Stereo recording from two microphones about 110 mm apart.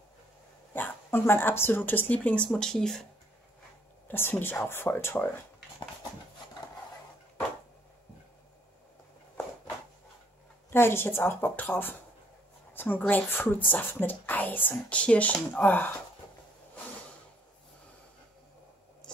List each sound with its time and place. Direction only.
0.7 s speech: 20° left (ahead or behind)
4.1 s a woman's voice: 20° left (ahead or behind)
10.7 s a woman's voice: 20° left (ahead or behind)